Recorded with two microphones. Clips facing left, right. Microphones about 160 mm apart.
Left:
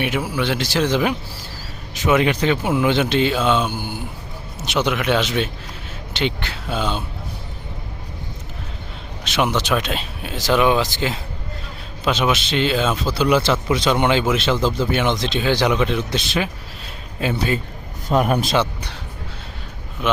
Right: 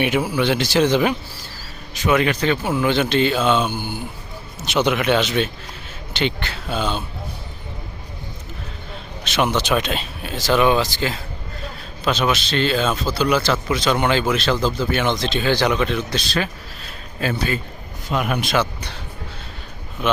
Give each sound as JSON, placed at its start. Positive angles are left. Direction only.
{"t": 0.3, "sound": "speech", "side_deg": 0}
{"t": 2.0, "sound": "speech", "side_deg": 20}
{"t": 9.2, "sound": "speech", "side_deg": 10}
{"t": 18.1, "sound": "a man's voice", "side_deg": 40}